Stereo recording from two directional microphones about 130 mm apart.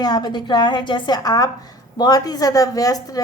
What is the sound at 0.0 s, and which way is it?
A woman's voice, 30° left (ahead or behind).